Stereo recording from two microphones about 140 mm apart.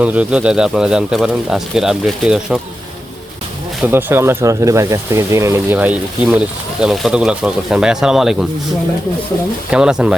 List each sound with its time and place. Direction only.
0.0 s speech: 10° right (ahead or behind)
3.8 s speech: 15° right (ahead or behind)
9.6 s speech: 5° right (ahead or behind)